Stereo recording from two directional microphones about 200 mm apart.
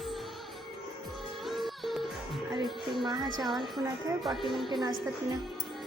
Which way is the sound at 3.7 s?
15° right (ahead or behind).